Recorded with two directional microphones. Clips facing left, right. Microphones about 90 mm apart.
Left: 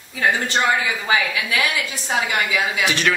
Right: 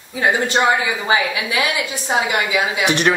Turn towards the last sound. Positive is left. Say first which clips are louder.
# right 3 dB
turn(degrees=-30)  # may be behind; listen again after turning